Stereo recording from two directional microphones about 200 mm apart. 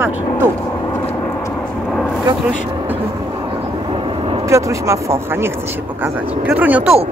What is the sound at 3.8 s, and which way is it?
Vehicle, 25° right (ahead or behind).